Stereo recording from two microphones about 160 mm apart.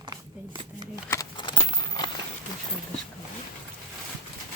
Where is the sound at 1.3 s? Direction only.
30° left (ahead or behind).